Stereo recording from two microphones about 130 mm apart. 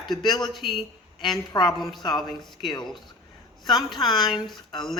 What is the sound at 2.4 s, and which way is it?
Speech, centre (ahead or behind).